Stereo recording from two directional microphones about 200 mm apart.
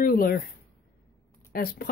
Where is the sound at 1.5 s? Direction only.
50° left (ahead or behind).